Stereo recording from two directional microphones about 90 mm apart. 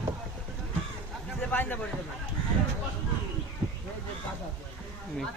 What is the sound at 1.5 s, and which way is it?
Speech, 20° left (ahead or behind).